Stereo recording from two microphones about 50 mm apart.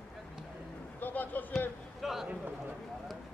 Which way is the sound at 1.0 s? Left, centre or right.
Left.